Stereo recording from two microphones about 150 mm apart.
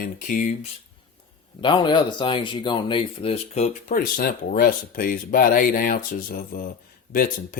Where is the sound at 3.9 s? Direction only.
65° left (ahead or behind).